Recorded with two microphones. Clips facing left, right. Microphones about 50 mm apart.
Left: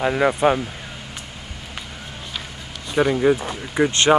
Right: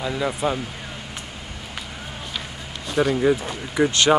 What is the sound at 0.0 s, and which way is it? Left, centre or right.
Speech, left.